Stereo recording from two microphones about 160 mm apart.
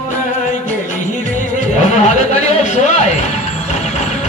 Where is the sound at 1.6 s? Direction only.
45° left (ahead or behind).